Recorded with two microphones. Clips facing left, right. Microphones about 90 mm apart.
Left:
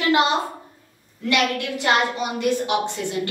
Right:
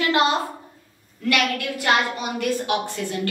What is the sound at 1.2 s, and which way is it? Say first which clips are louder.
A woman's voice: left 1 dB; 25° left (ahead or behind).